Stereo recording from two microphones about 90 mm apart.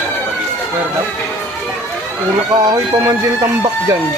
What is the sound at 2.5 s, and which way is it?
Speech, 50° right (ahead or behind).